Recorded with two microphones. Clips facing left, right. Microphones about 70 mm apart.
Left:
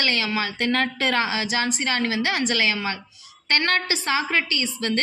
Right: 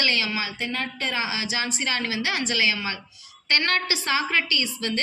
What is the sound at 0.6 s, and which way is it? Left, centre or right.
Speech, left.